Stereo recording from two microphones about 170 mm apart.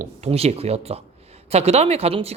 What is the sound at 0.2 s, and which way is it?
Speech, 35° right (ahead or behind).